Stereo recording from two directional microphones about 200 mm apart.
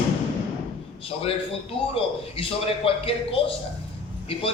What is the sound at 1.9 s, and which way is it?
A man's voice, 30° left (ahead or behind).